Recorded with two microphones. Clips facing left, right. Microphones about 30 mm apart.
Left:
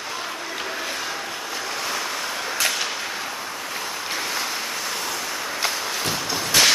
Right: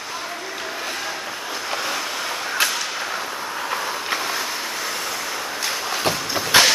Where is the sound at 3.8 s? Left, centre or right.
Right.